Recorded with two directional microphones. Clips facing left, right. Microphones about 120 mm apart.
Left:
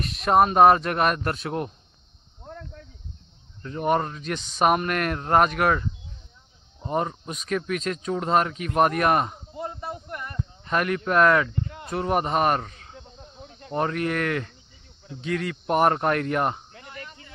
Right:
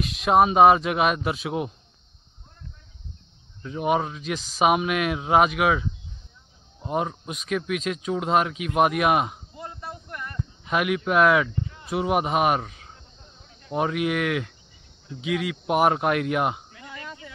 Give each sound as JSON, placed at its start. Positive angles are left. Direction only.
{"t": 0.0, "sound": "speech", "side_deg": 0}
{"t": 2.4, "sound": "cricket", "side_deg": 80}
{"t": 3.6, "sound": "speech", "side_deg": -5}
{"t": 9.6, "sound": "a sound", "side_deg": 20}
{"t": 10.6, "sound": "speech", "side_deg": -5}
{"t": 17.0, "sound": "a sound", "side_deg": -90}